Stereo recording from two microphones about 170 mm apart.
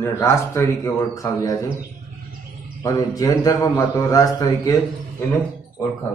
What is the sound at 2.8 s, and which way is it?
A man's voice, 20° left (ahead or behind).